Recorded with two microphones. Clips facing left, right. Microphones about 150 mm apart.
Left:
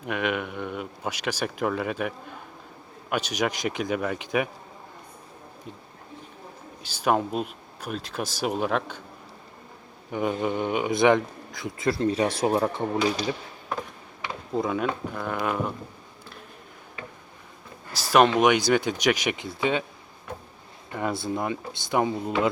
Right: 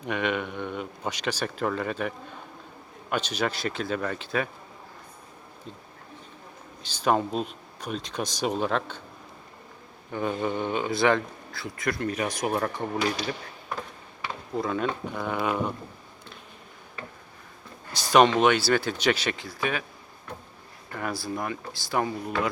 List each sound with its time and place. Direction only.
0.0 s speech: 5° left (ahead or behind)
6.8 s speech: 10° left (ahead or behind)
10.1 s speech: 15° left (ahead or behind)
11.9 s speech: 30° left (ahead or behind)
14.5 s speech: 20° left (ahead or behind)
14.8 s speech: 5° left (ahead or behind)
17.9 s speech: 5° left (ahead or behind); by 19.8 s 25° left (ahead or behind)
20.9 s speech: 20° left (ahead or behind)